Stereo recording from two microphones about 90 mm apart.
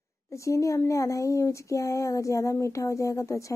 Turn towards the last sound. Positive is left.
turn(degrees=35)  # may be behind; listen again after turning